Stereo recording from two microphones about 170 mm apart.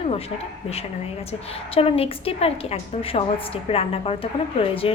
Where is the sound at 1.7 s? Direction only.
35° left (ahead or behind).